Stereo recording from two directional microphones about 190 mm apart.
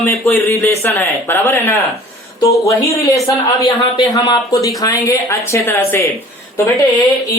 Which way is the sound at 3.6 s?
20° left (ahead or behind).